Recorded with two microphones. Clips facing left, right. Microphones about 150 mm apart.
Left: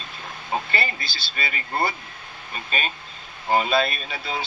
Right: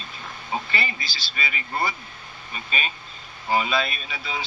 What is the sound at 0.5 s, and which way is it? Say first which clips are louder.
Speech: left 2 dB; 40° left (ahead or behind).